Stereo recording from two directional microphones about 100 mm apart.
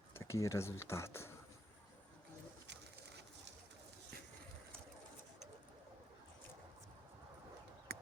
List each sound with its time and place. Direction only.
0.1 s speech: 25° left (ahead or behind)